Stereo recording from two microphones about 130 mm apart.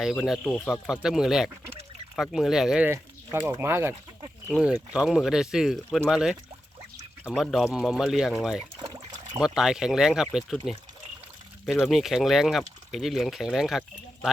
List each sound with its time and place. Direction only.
0.0 s speech: centre (ahead or behind)
2.9 s a sound: 15° right (ahead or behind)
3.6 s speech: 20° right (ahead or behind); by 14.3 s 5° right (ahead or behind)